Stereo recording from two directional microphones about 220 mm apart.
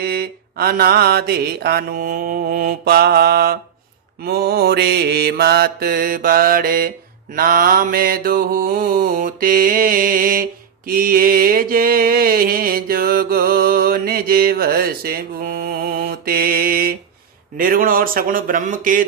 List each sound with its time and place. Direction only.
0.0 s mantra: 45° right (ahead or behind)
17.6 s speech: 40° right (ahead or behind)